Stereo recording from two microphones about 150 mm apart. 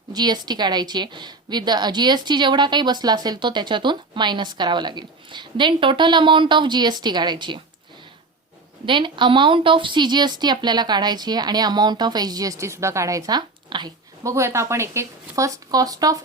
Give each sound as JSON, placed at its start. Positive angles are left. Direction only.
{"t": 0.1, "sound": "a woman's voice", "side_deg": -30}
{"t": 8.9, "sound": "a woman's voice", "side_deg": -30}